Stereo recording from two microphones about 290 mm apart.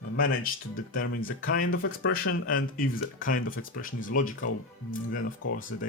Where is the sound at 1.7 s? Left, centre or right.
Left.